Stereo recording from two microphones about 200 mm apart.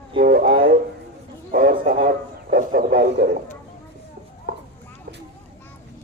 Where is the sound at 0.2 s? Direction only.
50° right (ahead or behind).